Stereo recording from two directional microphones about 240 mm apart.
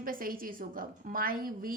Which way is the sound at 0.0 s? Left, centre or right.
Right.